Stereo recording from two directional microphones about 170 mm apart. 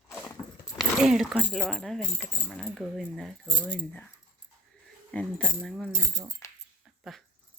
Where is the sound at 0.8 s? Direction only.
5° right (ahead or behind).